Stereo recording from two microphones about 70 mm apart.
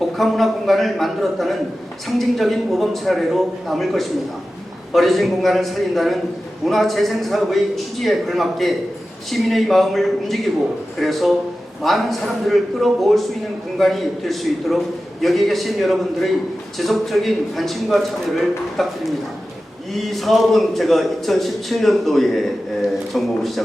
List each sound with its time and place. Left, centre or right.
0.0 s a man's voice: centre
19.9 s a man's voice: centre